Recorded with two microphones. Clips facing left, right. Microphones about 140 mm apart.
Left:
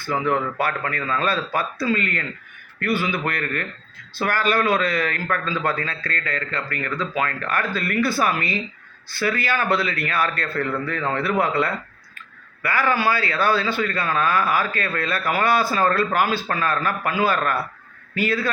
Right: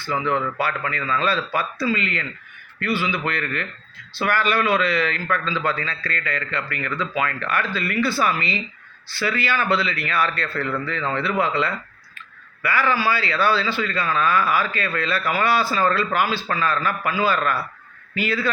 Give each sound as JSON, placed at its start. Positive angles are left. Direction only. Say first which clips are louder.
{"t": 0.6, "sound": "a man's voice", "louder": "left 1 dB", "side_deg": 50}